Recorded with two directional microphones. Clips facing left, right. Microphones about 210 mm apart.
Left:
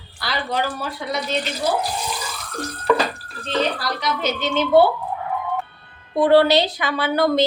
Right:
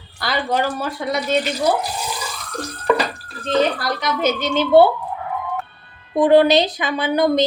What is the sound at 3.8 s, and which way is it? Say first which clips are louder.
A woman's voice: right 3 dB; 50° right (ahead or behind).